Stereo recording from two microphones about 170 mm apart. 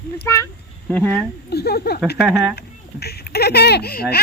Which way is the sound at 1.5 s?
70° left (ahead or behind).